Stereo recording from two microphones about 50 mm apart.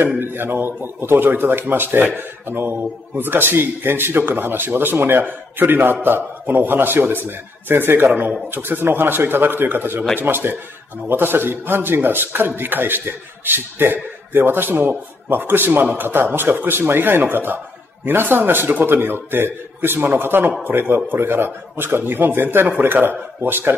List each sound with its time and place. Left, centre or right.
0.2 s speech: right